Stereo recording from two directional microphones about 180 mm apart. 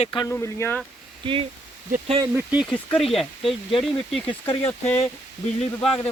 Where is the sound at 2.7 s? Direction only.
5° left (ahead or behind).